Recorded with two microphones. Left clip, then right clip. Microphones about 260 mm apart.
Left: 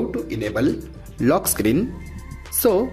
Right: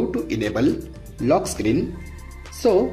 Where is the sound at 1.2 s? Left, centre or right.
Centre.